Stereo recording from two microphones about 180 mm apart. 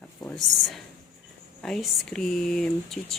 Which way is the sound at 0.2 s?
Centre (ahead or behind).